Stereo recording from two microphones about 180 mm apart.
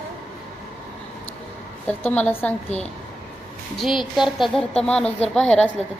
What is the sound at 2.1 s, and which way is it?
Speech, 10° left (ahead or behind).